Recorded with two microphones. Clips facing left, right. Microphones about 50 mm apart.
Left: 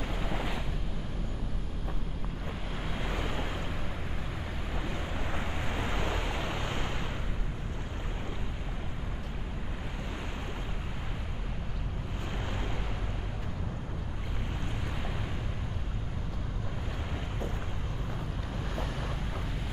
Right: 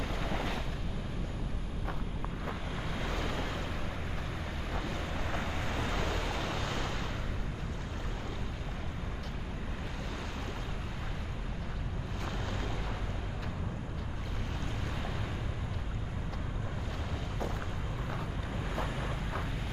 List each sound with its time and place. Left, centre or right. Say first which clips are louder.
0.0 s a sound: left 1 dB; centre
2.9 s vehicle: left 1 dB; centre
4.8 s vehicle: left 1 dB; centre